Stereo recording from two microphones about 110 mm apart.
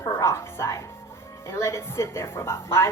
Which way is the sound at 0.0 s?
25° left (ahead or behind).